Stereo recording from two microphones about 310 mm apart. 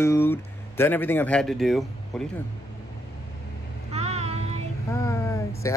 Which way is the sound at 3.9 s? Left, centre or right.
Centre.